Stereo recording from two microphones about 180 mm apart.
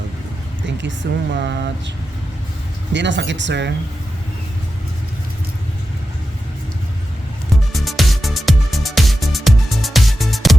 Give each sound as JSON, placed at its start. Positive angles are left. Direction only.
{"t": 0.8, "sound": "speech", "side_deg": -75}
{"t": 2.9, "sound": "speech", "side_deg": -80}
{"t": 7.5, "sound": "music", "side_deg": 0}